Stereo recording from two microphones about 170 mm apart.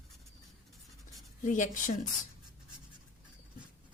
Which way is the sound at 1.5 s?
45° left (ahead or behind).